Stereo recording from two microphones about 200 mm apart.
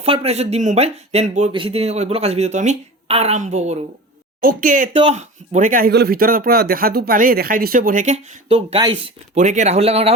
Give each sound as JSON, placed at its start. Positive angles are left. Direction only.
{"t": 0.0, "sound": "speech", "side_deg": -30}
{"t": 4.9, "sound": "speech", "side_deg": -30}